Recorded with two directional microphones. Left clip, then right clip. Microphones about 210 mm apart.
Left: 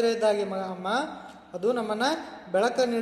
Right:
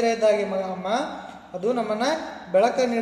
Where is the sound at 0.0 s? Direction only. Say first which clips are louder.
Right 4 dB; 30° left (ahead or behind).